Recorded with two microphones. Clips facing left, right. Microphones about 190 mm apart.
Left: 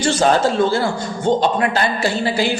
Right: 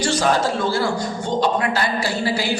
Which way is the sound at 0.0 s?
25° left (ahead or behind).